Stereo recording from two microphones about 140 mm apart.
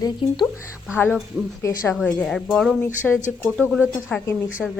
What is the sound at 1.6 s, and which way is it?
Speech, 20° left (ahead or behind).